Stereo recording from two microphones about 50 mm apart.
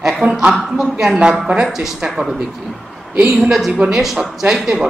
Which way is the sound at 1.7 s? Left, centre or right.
Centre.